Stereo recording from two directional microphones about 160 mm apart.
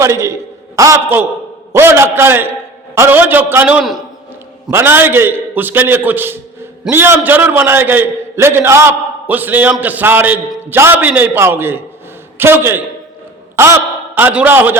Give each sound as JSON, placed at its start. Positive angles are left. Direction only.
{"t": 0.0, "sound": "a man's voice", "side_deg": -20}